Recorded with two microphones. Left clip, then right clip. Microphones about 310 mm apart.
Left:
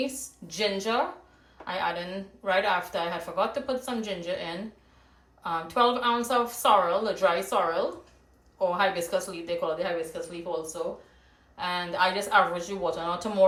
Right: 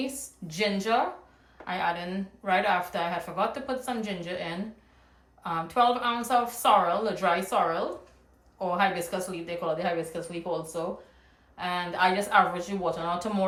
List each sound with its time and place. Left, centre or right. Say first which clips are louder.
0.0 s a woman's voice: left 3 dB; centre
11.5 s a woman's voice: left 1 dB; centre